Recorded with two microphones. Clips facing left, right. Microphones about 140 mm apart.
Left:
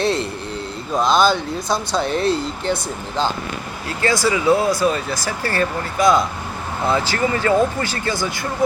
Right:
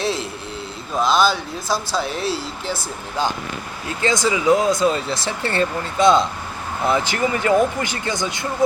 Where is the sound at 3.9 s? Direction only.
20° right (ahead or behind).